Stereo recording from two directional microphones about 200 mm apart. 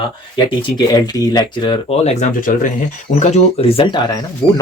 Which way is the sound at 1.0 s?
20° left (ahead or behind).